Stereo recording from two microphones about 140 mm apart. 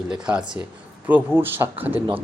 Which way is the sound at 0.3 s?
5° right (ahead or behind).